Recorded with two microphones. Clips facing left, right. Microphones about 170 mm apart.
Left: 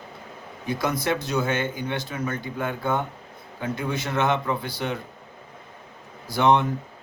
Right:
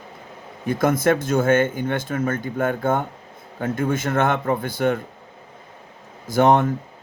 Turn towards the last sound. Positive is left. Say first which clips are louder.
# right 4 dB
turn(degrees=-45)  # may be behind; listen again after turning